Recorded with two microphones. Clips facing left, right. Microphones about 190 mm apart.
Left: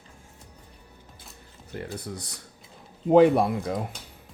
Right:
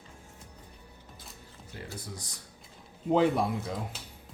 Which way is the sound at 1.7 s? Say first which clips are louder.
Left 7 dB; 55° left (ahead or behind).